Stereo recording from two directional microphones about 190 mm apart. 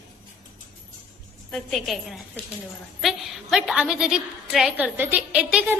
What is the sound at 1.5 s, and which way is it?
A woman's voice, centre (ahead or behind).